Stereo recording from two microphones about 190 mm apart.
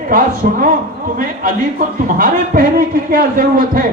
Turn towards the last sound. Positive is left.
turn(degrees=-50)  # may be behind; listen again after turning